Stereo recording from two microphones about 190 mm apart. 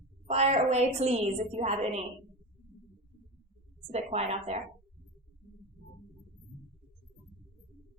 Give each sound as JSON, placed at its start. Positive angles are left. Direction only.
{"t": 0.3, "sound": "a woman's voice", "side_deg": -35}
{"t": 3.9, "sound": "a woman's voice", "side_deg": -35}